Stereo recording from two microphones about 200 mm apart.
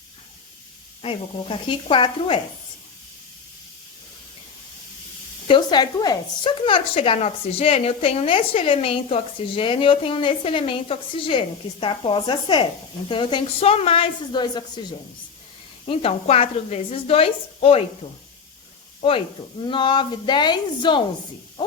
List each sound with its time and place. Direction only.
1.0 s a woman's voice: 25° left (ahead or behind)
5.5 s a woman's voice: 20° left (ahead or behind)
19.6 s a woman's voice: 25° left (ahead or behind)